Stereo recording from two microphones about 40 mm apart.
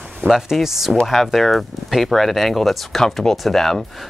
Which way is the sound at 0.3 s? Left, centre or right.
Centre.